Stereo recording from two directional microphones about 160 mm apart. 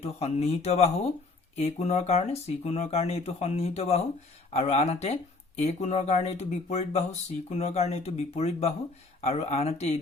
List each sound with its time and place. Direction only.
0.0 s speech: 40° left (ahead or behind)